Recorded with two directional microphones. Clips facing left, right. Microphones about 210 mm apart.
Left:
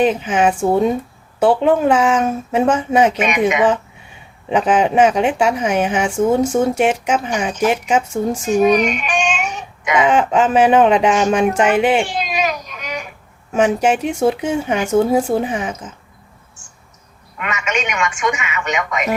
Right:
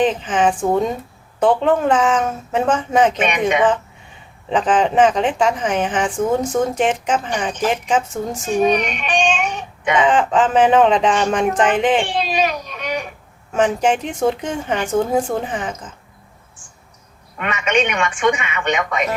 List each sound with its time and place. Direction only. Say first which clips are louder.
0.0 s a woman's voice: left 2 dB; 10° left (ahead or behind)
4.4 s a woman's voice: left 2 dB; 10° left (ahead or behind)
8.4 s speech: left 3 dB; 30° right (ahead or behind)
10.0 s a woman's voice: left 2 dB; 10° left (ahead or behind)
12.0 s a sound: right 1 dB; 30° right (ahead or behind)
13.5 s a woman's voice: left 2 dB; 10° left (ahead or behind)
17.3 s speech: right 4 dB; 30° right (ahead or behind)